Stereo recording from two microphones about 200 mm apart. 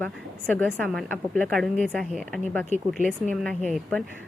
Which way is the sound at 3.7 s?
5° left (ahead or behind).